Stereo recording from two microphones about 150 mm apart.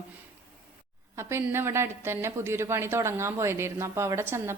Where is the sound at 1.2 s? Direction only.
15° right (ahead or behind).